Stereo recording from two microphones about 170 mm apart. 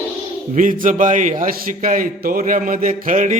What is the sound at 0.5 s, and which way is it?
A man's voice, 50° right (ahead or behind).